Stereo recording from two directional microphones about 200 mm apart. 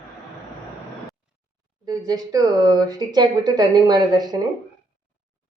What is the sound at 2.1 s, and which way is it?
A woman's voice, 20° right (ahead or behind).